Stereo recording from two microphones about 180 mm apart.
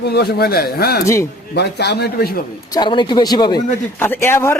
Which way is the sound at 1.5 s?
65° left (ahead or behind).